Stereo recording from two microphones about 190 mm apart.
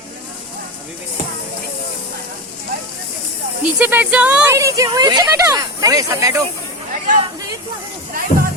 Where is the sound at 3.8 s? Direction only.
10° right (ahead or behind).